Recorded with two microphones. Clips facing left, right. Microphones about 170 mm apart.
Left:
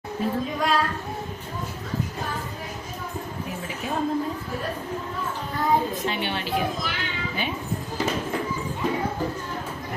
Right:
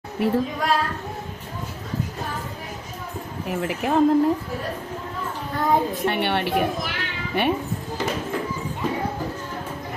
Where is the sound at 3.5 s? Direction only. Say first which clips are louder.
Right 11 dB; 70° right (ahead or behind).